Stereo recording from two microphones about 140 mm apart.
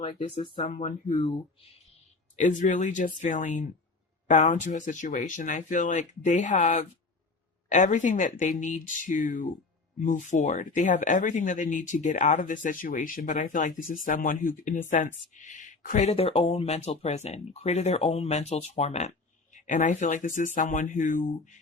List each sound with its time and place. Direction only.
0.4 s speech: 40° left (ahead or behind)
0.8 s speech: 55° left (ahead or behind)
2.3 s speech: 65° left (ahead or behind)
16.0 s speech: 45° left (ahead or behind)
19.5 s speech: 65° left (ahead or behind)